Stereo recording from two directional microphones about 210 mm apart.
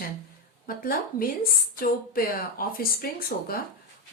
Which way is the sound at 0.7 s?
45° left (ahead or behind).